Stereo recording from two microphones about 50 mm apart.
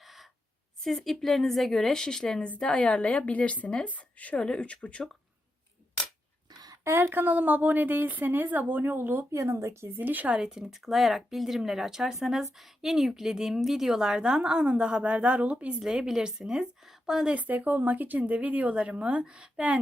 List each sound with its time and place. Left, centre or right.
0.0 s a sound: centre
0.8 s a woman's voice: centre
2.6 s a woman's voice: left
4.4 s a woman's voice: centre
6.8 s a woman's voice: right
9.3 s speech: right
10.0 s a woman's voice: right
10.3 s a woman's voice: centre; by 15.8 s right
15.8 s a woman's voice: centre
17.2 s a woman's voice: right